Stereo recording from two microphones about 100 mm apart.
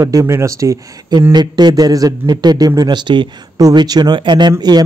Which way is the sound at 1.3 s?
45° right (ahead or behind).